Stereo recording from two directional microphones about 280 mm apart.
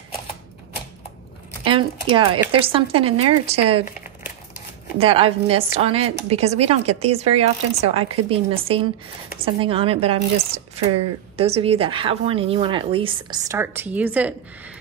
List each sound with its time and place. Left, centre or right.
1.6 s speech: centre
4.9 s speech: centre